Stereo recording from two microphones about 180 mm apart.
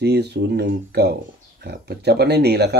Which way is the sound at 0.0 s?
65° right (ahead or behind).